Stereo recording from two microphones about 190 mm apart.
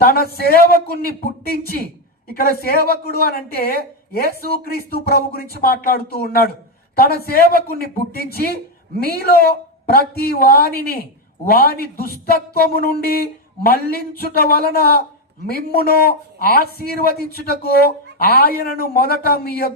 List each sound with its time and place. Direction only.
0.3 s a man's voice: 55° left (ahead or behind)